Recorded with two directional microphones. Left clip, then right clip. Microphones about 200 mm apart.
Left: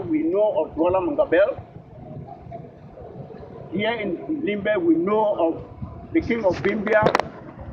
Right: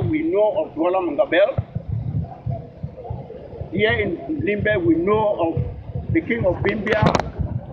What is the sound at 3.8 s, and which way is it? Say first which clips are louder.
Speech: right 5 dB; 10° left (ahead or behind).